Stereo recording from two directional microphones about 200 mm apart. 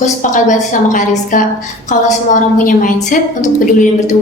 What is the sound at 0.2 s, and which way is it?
A woman's voice, 40° left (ahead or behind).